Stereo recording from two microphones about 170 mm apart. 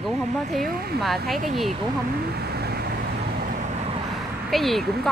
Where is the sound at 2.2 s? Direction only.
70° right (ahead or behind).